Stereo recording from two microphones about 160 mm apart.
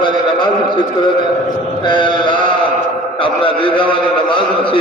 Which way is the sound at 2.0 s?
30° left (ahead or behind).